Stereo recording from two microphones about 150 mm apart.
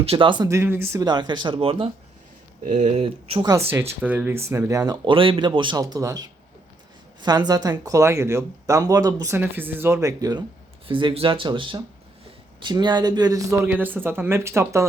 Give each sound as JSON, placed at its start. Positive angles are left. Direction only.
{"t": 0.0, "sound": "speech", "side_deg": -35}
{"t": 0.4, "sound": "speech", "side_deg": -15}
{"t": 1.0, "sound": "speech", "side_deg": -30}
{"t": 2.6, "sound": "speech", "side_deg": -50}
{"t": 3.7, "sound": "speech", "side_deg": -15}